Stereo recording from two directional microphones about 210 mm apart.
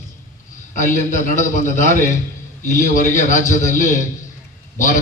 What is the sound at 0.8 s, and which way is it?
A man's voice, 35° left (ahead or behind).